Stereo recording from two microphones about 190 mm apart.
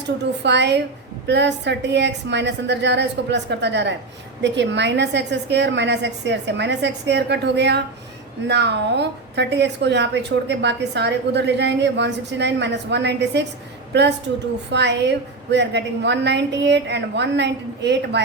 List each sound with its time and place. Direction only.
0.4 s a woman's voice: 65° right (ahead or behind)
14.7 s a woman's voice: 65° right (ahead or behind)